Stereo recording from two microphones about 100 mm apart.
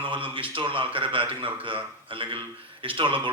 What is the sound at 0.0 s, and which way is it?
Speech, 60° right (ahead or behind).